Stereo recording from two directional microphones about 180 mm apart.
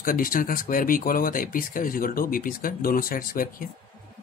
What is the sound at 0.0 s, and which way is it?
Speech, 50° left (ahead or behind).